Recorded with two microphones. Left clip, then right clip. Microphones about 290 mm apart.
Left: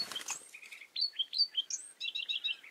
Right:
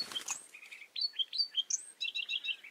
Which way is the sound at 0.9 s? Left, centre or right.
Right.